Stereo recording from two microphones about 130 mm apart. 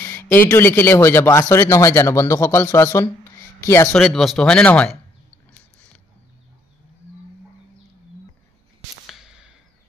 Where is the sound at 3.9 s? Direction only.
Centre (ahead or behind).